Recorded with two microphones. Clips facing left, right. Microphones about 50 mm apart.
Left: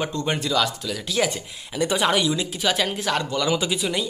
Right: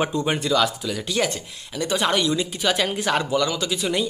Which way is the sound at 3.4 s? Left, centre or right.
Centre.